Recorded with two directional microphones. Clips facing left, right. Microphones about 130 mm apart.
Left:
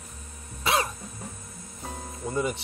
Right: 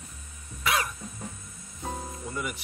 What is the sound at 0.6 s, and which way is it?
Cough, 30° left (ahead or behind).